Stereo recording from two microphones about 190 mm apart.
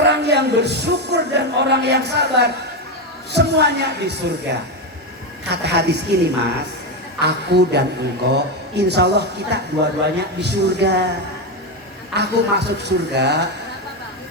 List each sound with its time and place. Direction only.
0.0 s music: 65° right (ahead or behind)
3.3 s speech: 60° right (ahead or behind)
5.5 s speech: 60° right (ahead or behind)
7.2 s speech: 60° right (ahead or behind)
12.1 s speech: 65° right (ahead or behind)